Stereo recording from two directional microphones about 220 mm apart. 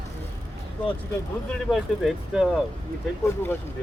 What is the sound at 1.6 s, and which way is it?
Speech, centre (ahead or behind).